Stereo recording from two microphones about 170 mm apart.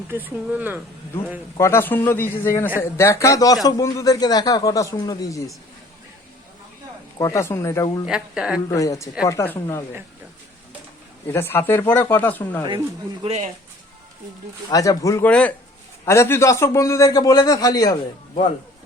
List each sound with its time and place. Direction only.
0.1 s speech: 10° right (ahead or behind)
1.5 s a man's voice: 15° left (ahead or behind)
7.2 s speech: 15° left (ahead or behind)
8.0 s a woman's voice: 5° right (ahead or behind)
8.7 s a man's voice: 20° left (ahead or behind)
11.3 s speech: 15° left (ahead or behind)
13.2 s speech: 40° right (ahead or behind)
14.7 s a man's voice: 20° left (ahead or behind)
15.3 s a man's voice: 5° left (ahead or behind)